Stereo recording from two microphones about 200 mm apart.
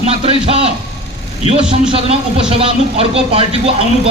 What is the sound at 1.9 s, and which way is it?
A man's voice, 25° right (ahead or behind).